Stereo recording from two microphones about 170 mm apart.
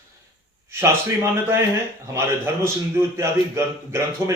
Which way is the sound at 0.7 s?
15° right (ahead or behind).